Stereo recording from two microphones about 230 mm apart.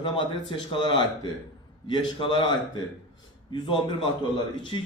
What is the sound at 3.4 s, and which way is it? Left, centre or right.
Speech, centre.